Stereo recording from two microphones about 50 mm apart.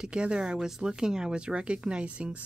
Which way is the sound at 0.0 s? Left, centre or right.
Centre.